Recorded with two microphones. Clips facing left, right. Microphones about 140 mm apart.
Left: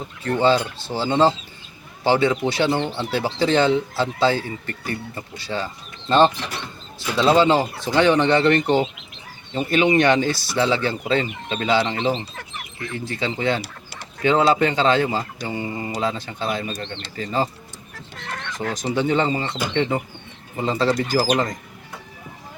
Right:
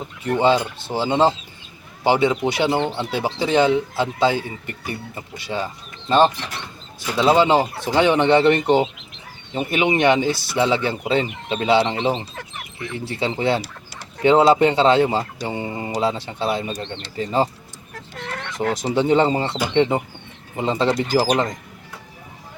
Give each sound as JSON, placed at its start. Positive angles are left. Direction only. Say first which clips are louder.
{"t": 0.3, "sound": "speech", "louder": "right 1 dB", "side_deg": -20}
{"t": 18.6, "sound": "speech", "louder": "right 3 dB", "side_deg": -30}